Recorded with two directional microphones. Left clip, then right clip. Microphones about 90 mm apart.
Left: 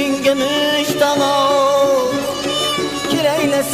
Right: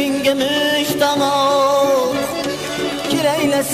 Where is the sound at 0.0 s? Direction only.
15° left (ahead or behind).